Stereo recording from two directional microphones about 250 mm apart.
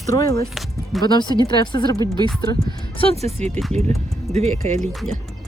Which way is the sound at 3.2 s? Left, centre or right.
Right.